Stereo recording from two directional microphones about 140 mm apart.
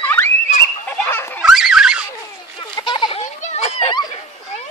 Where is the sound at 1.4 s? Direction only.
5° right (ahead or behind).